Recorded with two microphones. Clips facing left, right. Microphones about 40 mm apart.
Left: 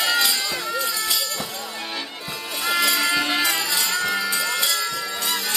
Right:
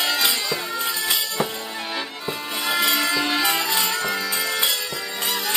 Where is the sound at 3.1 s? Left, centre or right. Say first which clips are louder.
Even; centre.